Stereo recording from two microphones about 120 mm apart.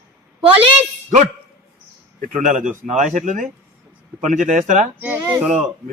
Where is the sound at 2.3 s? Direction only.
90° right.